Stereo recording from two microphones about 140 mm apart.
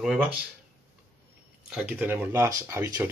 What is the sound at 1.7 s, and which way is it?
Speech, 10° right (ahead or behind).